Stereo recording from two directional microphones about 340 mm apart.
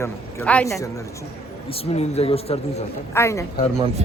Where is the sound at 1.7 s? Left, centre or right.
Centre.